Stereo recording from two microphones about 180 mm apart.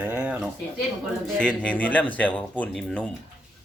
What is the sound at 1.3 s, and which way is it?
Speech, 5° left (ahead or behind).